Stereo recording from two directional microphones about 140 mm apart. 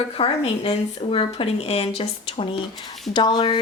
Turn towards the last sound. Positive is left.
turn(degrees=35)  # may be behind; listen again after turning